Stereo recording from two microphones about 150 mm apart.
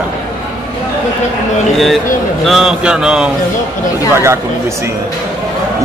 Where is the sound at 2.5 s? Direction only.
5° right (ahead or behind).